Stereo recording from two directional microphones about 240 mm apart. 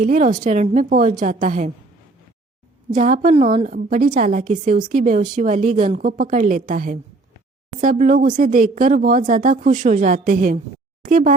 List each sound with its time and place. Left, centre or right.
0.0 s a woman's voice: right
2.9 s a woman's voice: right